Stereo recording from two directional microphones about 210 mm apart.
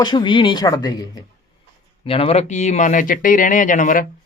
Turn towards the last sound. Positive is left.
turn(degrees=40)  # may be behind; listen again after turning